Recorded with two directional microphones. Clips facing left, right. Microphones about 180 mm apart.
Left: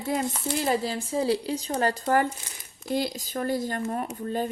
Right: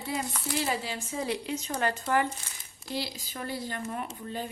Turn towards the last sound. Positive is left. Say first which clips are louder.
# left 7 dB
turn(degrees=45)  # may be behind; listen again after turning